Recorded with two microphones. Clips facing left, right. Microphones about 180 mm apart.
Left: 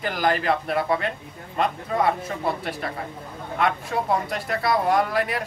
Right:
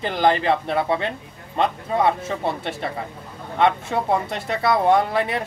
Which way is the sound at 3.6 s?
25° right (ahead or behind).